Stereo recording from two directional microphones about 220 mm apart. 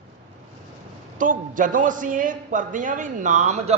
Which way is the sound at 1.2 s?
35° right (ahead or behind).